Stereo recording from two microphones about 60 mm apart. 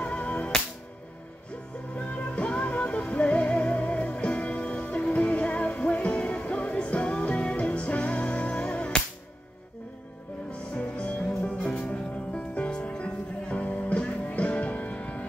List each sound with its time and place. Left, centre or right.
0.0 s music: left
2.0 s music: left
10.7 s music: left